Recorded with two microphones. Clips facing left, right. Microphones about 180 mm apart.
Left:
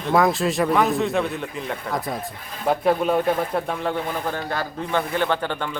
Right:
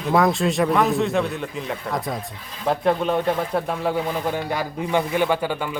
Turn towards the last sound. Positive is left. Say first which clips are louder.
# right 2 dB
turn(degrees=-10)  # may be behind; listen again after turning